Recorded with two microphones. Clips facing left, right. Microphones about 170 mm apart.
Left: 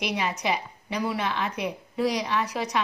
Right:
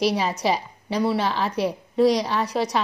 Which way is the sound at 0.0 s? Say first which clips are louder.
Right 6 dB; 35° right (ahead or behind).